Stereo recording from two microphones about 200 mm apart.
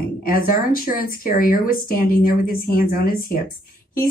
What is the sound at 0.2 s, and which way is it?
A woman's voice, 45° left (ahead or behind).